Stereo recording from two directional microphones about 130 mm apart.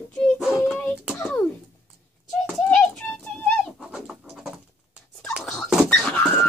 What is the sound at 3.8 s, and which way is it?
Bird, 5° right (ahead or behind).